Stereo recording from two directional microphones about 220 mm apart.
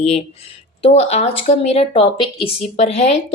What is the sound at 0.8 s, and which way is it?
A woman's voice, 25° left (ahead or behind).